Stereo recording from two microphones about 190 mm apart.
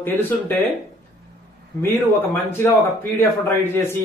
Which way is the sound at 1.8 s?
10° left (ahead or behind).